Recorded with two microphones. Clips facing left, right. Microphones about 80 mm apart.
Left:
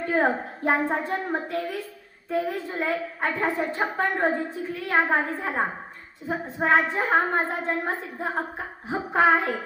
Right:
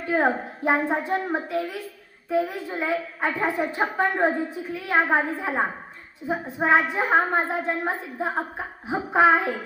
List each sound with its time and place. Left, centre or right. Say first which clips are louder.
0.0 s a woman's voice: right 1 dB; centre